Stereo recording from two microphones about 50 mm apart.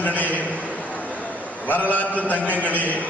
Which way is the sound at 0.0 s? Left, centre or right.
Left.